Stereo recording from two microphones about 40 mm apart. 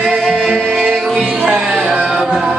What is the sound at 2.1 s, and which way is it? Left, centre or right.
Music, centre.